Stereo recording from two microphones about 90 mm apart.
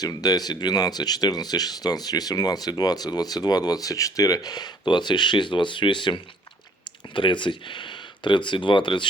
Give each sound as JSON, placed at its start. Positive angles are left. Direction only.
{"t": 0.0, "sound": "speech", "side_deg": 45}